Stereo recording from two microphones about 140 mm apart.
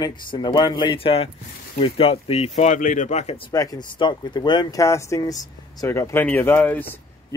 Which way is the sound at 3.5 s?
25° left (ahead or behind).